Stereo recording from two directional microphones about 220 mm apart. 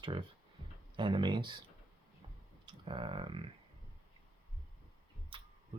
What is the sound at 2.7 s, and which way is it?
Speech, 25° right (ahead or behind).